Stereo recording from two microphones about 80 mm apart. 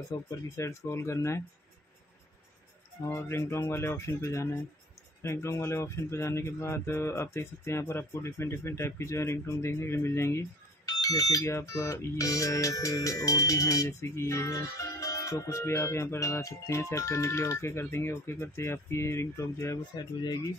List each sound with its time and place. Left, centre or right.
0.6 s speech: left
3.0 s speech: left
10.9 s speech: left